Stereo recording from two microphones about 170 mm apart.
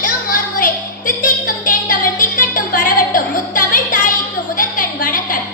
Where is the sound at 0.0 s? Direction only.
55° left (ahead or behind).